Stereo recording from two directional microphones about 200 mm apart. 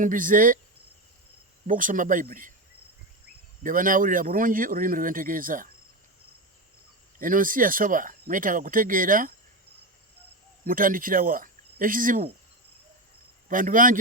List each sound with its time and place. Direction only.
0.0 s speech: 40° right (ahead or behind)
1.6 s speech: 40° right (ahead or behind)
3.6 s speech: 40° right (ahead or behind)
7.2 s speech: 45° right (ahead or behind)
10.7 s speech: 45° right (ahead or behind)
13.5 s speech: 40° right (ahead or behind)